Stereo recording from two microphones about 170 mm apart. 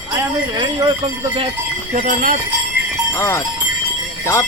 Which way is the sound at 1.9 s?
50° right (ahead or behind).